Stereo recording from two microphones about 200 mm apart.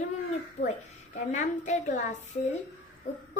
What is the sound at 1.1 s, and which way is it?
A woman's voice, 35° left (ahead or behind).